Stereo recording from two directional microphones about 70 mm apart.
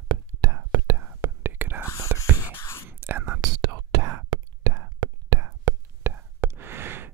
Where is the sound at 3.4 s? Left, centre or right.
Right.